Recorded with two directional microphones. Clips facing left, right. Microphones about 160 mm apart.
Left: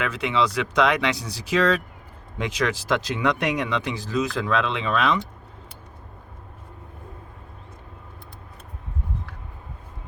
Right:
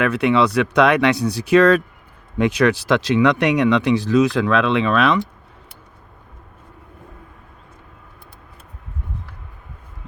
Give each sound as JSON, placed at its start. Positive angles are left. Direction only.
{"t": 0.0, "sound": "speech", "side_deg": -60}